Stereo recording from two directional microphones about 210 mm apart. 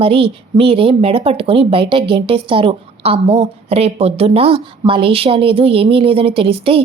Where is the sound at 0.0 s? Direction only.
25° right (ahead or behind).